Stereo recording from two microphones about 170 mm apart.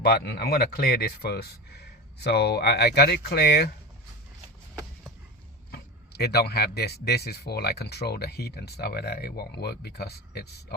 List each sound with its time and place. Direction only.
0.0 s speech: 70° left (ahead or behind)
5.7 s speech: 70° left (ahead or behind)